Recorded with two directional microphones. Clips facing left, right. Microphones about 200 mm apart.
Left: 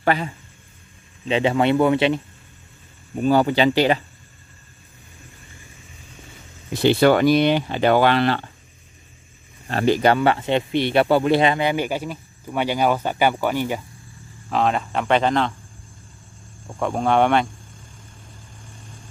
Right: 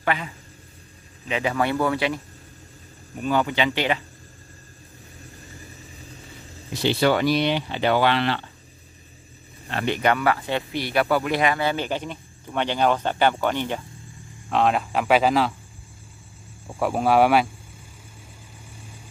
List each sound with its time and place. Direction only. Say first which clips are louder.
0.0 s a man's voice: left 5 dB; 35° left (ahead or behind)
1.2 s speech: left 5 dB; 25° left (ahead or behind)
3.2 s speech: left 6 dB; 35° left (ahead or behind)
6.7 s speech: left 5 dB; 55° left (ahead or behind)
9.7 s speech: left 5 dB; 40° left (ahead or behind); by 15.5 s 5° right (ahead or behind)
16.6 s speech: even; 5° right (ahead or behind)